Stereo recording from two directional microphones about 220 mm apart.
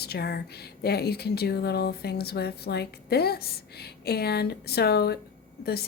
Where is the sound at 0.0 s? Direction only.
45° left (ahead or behind).